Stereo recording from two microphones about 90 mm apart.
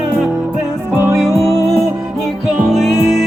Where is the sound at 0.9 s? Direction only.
25° right (ahead or behind).